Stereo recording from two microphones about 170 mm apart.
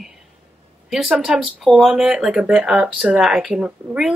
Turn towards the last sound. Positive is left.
turn(degrees=-5)  # may be behind; listen again after turning